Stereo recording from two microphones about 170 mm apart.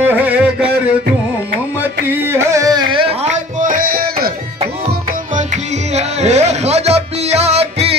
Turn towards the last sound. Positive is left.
turn(degrees=-40)  # may be behind; listen again after turning